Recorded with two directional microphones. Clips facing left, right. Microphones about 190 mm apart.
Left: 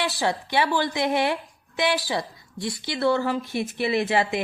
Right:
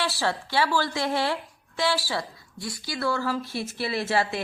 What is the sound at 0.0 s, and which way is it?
A woman's voice, 15° left (ahead or behind).